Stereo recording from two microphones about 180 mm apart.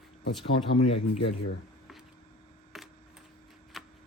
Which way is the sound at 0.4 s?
35° left (ahead or behind).